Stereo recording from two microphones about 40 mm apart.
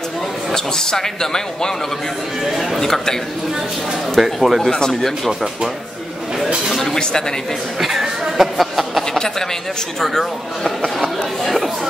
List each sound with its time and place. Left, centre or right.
0.5 s speech: centre
2.4 s speech: centre
2.8 s speech: centre
4.2 s speech: centre
4.6 s speech: centre
7.0 s speech: centre
7.8 s a sound: centre
9.9 s speech: centre